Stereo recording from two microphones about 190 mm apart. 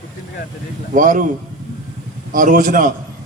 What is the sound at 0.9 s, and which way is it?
Speech, 45° right (ahead or behind).